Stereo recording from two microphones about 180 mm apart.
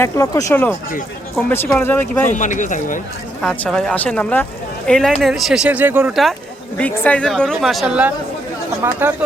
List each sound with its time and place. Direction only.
0.0 s speech: 15° left (ahead or behind)
2.3 s speech: 45° left (ahead or behind)
3.4 s speech: 5° left (ahead or behind)
6.7 s speech: 10° left (ahead or behind); by 9.1 s 10° right (ahead or behind)